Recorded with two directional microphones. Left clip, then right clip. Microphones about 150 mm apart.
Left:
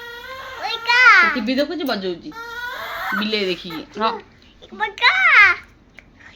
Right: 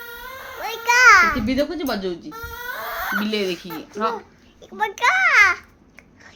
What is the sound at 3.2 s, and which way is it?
Speech, 20° left (ahead or behind).